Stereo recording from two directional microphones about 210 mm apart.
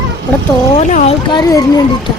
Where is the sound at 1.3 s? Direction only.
20° left (ahead or behind).